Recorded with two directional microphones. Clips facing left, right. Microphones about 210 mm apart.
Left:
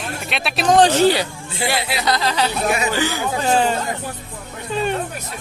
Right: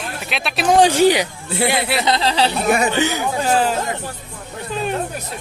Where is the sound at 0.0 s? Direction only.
Centre (ahead or behind); by 2.5 s 30° right (ahead or behind).